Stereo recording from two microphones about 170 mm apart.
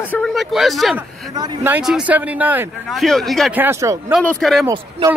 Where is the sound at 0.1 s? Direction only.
5° left (ahead or behind).